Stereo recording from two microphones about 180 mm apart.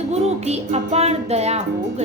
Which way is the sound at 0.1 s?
35° right (ahead or behind).